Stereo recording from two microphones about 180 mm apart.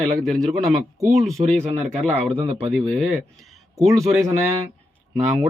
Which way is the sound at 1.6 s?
35° right (ahead or behind).